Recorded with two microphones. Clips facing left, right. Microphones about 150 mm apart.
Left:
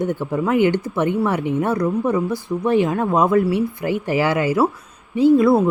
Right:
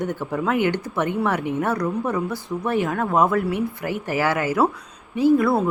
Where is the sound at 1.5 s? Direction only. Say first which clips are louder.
Left 3 dB; 10° left (ahead or behind).